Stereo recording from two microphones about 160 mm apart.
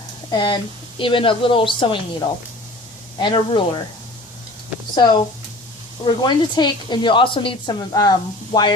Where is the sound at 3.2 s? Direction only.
30° left (ahead or behind).